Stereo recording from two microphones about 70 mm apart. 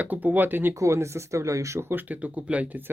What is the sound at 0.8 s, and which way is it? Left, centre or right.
Speech, right.